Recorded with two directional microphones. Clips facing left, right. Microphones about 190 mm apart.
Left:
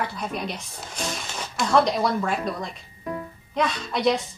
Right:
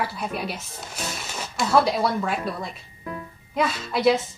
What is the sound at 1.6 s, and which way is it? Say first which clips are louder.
A woman's voice: even; 5° right (ahead or behind).